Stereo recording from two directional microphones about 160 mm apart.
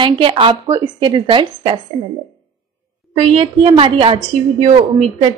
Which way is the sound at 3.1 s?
35° right (ahead or behind).